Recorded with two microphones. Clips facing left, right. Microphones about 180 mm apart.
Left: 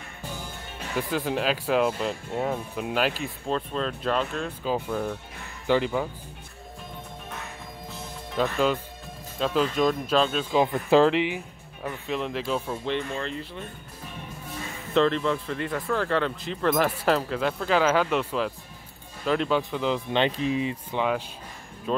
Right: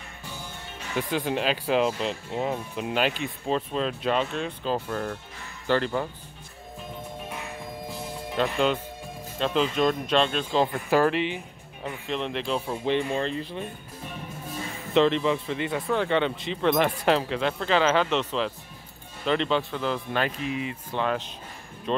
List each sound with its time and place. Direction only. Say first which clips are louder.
0.9 s speech: even; centre (ahead or behind)
8.4 s speech: even; 5° left (ahead or behind)
10.5 s speech: left 4 dB; 15° left (ahead or behind)
12.5 s speech: right 6 dB; 10° right (ahead or behind)
15.0 s speech: right 1 dB; centre (ahead or behind); by 20.7 s 30° left (ahead or behind)
20.9 s speech: right 1 dB; 10° left (ahead or behind)